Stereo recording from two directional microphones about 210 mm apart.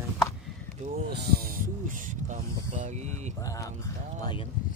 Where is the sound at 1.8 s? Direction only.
40° right (ahead or behind).